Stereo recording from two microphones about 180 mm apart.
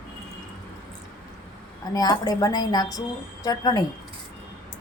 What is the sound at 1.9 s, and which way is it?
A woman's voice, 20° left (ahead or behind).